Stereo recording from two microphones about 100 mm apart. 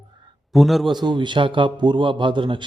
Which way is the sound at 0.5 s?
Centre (ahead or behind).